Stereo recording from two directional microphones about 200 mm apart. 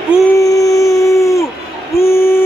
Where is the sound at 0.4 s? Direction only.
15° left (ahead or behind).